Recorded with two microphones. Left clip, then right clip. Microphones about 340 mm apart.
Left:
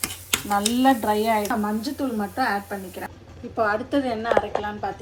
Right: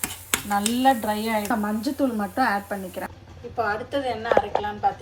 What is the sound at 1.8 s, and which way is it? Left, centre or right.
Speech, right.